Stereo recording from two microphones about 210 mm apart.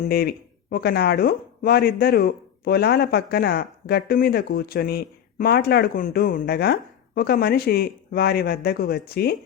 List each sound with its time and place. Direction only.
0.0 s speech: 45° left (ahead or behind)